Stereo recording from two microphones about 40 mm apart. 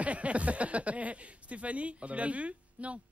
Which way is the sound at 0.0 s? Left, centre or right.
Right.